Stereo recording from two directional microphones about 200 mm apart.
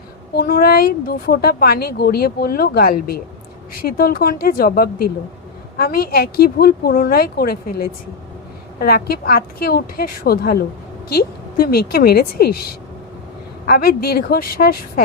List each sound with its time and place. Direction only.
0.3 s speech: 50° left (ahead or behind)
13.7 s speech: 50° left (ahead or behind)